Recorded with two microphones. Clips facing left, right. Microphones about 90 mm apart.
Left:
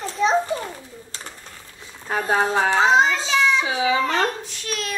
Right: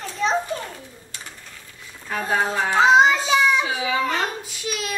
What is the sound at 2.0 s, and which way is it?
Speech, 30° left (ahead or behind).